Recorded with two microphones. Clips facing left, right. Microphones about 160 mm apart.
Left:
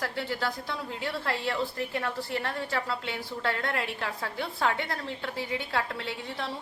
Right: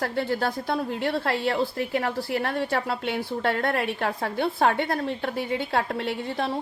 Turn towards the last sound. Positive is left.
turn(degrees=-60)  # may be behind; listen again after turning